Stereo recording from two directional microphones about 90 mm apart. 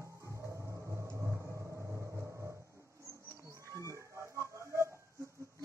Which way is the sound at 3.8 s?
35° right (ahead or behind).